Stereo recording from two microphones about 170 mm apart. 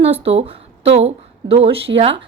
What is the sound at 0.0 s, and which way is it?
A woman's voice, 35° right (ahead or behind).